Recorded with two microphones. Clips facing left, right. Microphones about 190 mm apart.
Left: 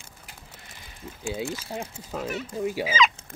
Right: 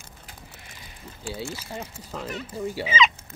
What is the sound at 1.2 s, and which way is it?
Speech, 15° left (ahead or behind).